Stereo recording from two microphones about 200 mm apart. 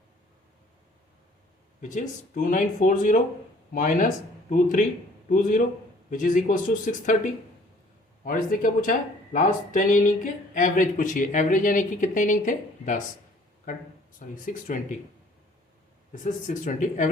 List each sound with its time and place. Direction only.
1.8 s speech: 40° left (ahead or behind)
8.2 s speech: 45° left (ahead or behind)
16.2 s speech: 40° left (ahead or behind)